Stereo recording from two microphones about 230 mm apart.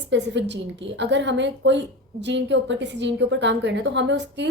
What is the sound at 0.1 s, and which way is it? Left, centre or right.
A woman's voice, right.